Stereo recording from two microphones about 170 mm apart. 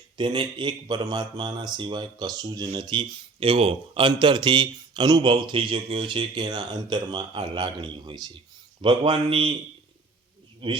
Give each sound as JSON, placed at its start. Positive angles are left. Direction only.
{"t": 0.2, "sound": "speech", "side_deg": -25}
{"t": 10.6, "sound": "speech", "side_deg": -30}